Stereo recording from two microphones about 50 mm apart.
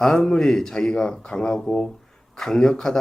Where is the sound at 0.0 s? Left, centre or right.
Centre.